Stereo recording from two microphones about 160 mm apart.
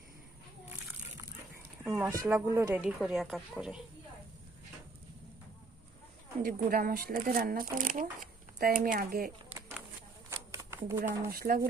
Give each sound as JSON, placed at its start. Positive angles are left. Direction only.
{"t": 2.0, "sound": "speech", "side_deg": -20}
{"t": 6.4, "sound": "speech", "side_deg": -65}
{"t": 10.2, "sound": "shuffling cards", "side_deg": -20}
{"t": 11.3, "sound": "speech", "side_deg": -65}